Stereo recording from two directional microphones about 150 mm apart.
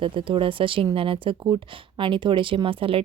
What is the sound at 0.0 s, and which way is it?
Speech, 35° right (ahead or behind).